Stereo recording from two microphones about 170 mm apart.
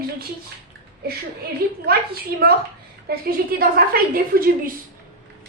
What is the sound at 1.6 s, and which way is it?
Speech, 60° right (ahead or behind).